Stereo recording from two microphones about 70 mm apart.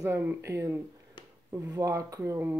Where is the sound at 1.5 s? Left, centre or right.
Right.